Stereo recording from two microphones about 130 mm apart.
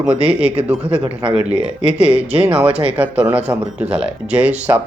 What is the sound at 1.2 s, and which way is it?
Speech, 50° right (ahead or behind).